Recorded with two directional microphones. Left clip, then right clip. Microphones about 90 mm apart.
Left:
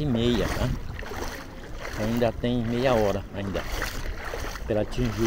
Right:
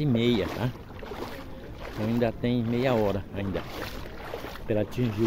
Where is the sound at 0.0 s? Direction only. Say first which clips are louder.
Even; 25° right (ahead or behind).